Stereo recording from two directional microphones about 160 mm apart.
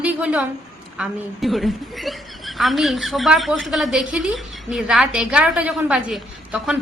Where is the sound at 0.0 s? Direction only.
10° right (ahead or behind).